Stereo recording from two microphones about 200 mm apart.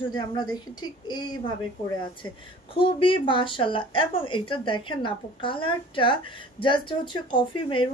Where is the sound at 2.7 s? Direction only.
25° left (ahead or behind).